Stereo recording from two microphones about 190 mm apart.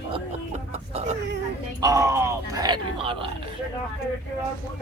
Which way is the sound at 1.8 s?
20° right (ahead or behind).